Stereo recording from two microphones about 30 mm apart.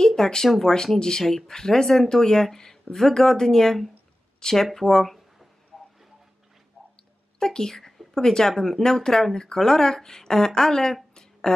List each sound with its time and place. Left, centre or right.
0.0 s speech: centre
5.7 s a sound: centre
7.3 s a woman's voice: centre
11.5 s speech: left